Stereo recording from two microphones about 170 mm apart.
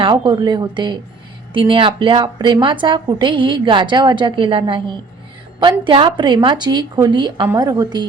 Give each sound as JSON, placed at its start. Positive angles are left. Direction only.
{"t": 0.0, "sound": "a woman's voice", "side_deg": -25}